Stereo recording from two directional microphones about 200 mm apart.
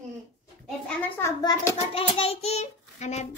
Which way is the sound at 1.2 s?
15° left (ahead or behind).